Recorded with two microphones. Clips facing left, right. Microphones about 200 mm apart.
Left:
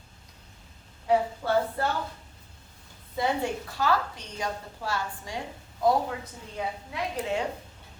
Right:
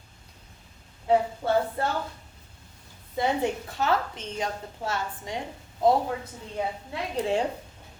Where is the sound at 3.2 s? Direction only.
20° right (ahead or behind).